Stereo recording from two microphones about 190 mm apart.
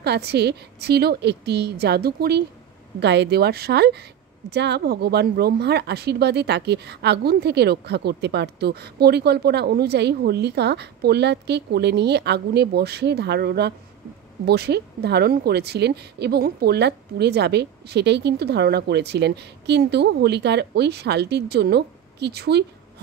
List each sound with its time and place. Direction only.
0.0 s speech: 60° right (ahead or behind)